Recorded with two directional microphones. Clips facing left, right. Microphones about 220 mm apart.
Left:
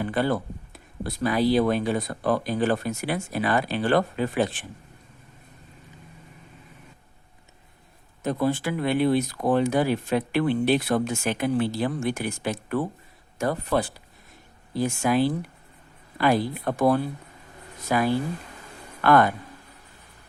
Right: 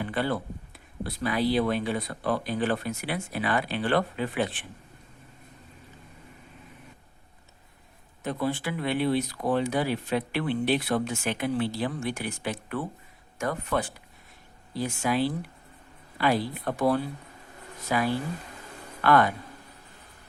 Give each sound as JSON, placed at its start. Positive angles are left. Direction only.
{"t": 0.0, "sound": "speech", "side_deg": 45}
{"t": 8.2, "sound": "speech", "side_deg": 40}
{"t": 14.7, "sound": "speech", "side_deg": 45}